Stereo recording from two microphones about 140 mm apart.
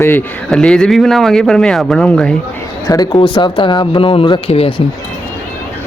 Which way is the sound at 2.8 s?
30° left (ahead or behind).